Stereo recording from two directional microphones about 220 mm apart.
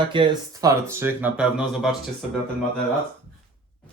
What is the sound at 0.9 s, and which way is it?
Speech, 10° right (ahead or behind).